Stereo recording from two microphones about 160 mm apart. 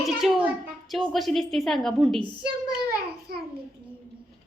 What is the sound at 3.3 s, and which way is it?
Child singing, 70° right (ahead or behind).